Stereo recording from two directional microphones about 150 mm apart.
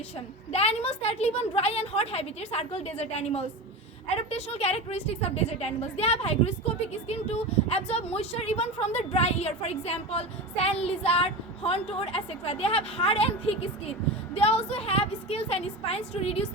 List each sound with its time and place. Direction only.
0.5 s speech: 45° left (ahead or behind)